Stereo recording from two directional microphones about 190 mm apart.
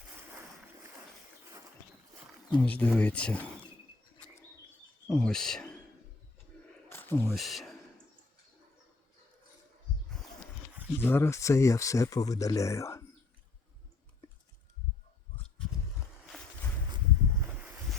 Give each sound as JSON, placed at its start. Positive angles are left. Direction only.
{"t": 2.5, "sound": "speech", "side_deg": 10}
{"t": 5.0, "sound": "speech", "side_deg": 5}
{"t": 6.8, "sound": "a sound", "side_deg": 10}
{"t": 7.3, "sound": "speech", "side_deg": 0}
{"t": 11.0, "sound": "speech", "side_deg": 10}